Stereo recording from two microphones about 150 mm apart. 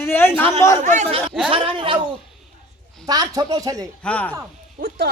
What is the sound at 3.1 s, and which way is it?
Speech, 25° right (ahead or behind).